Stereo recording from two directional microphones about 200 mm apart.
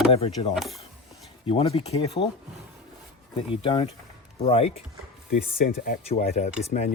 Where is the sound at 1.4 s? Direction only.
25° left (ahead or behind).